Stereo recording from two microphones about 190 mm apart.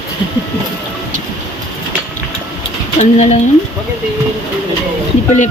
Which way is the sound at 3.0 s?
40° left (ahead or behind).